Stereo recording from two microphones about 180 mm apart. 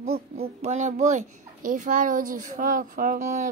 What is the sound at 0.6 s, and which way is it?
A child's voice, 40° right (ahead or behind).